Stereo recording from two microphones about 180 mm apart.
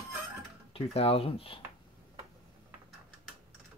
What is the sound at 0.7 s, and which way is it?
Speech, 35° left (ahead or behind).